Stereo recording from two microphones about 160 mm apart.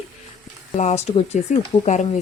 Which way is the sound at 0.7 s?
45° left (ahead or behind).